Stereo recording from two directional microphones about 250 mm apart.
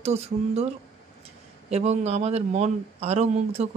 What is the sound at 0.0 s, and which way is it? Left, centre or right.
Speech, right.